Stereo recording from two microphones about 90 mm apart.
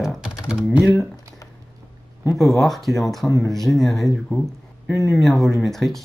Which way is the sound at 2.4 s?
Centre (ahead or behind).